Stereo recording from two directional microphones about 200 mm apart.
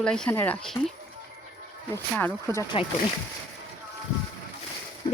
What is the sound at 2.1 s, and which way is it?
Speech, 10° left (ahead or behind).